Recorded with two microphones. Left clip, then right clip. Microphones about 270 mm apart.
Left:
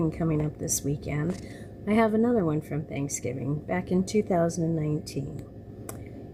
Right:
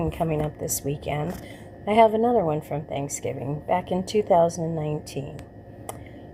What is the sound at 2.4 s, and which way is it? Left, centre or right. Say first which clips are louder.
A woman's voice: right 4 dB; right.